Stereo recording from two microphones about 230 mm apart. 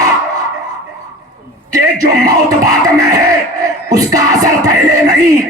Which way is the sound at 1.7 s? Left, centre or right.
Centre.